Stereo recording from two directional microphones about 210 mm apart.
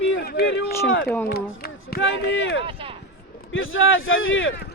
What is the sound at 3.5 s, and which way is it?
Speech, 70° left (ahead or behind).